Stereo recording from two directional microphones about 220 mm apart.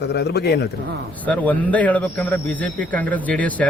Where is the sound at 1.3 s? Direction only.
5° left (ahead or behind).